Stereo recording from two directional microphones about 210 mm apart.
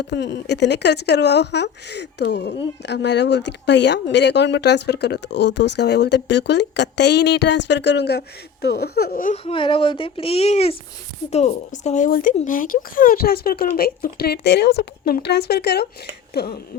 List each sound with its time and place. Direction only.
0.0 s speech: 55° left (ahead or behind); by 9.4 s 40° left (ahead or behind)
9.4 s speech: 25° left (ahead or behind); by 16.6 s 50° left (ahead or behind)